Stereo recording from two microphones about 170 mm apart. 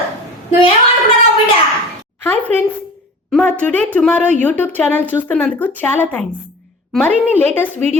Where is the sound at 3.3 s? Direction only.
5° left (ahead or behind).